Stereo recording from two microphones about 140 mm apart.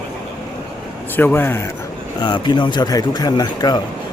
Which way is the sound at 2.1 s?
30° left (ahead or behind).